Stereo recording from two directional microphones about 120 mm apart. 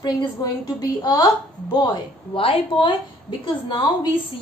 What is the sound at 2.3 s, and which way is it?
A woman's voice, 50° left (ahead or behind).